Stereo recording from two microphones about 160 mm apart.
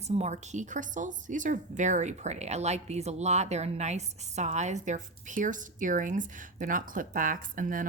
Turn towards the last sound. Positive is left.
turn(degrees=-60)  # may be behind; listen again after turning